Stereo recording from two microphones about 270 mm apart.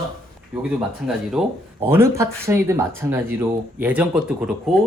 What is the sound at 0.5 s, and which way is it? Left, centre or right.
Speech, centre.